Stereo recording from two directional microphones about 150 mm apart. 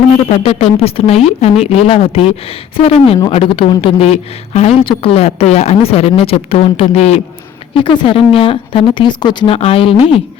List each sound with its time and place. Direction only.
0.3 s speech: 40° left (ahead or behind)